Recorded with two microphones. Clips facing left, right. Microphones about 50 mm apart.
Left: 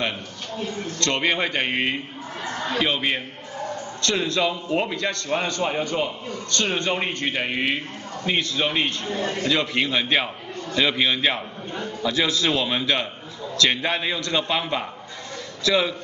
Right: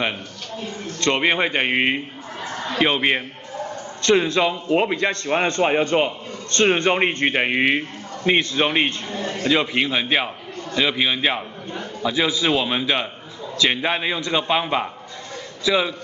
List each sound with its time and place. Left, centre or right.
0.9 s a man's voice: right
9.4 s a man's voice: centre